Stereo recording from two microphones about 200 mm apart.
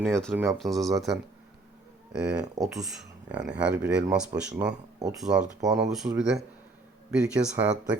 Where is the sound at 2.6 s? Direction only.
20° right (ahead or behind).